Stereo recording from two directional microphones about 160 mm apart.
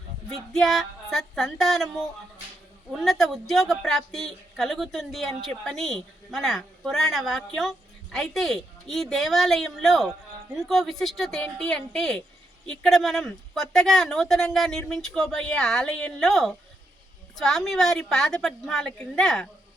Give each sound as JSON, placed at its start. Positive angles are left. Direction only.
{"t": 0.5, "sound": "a woman's voice", "side_deg": 0}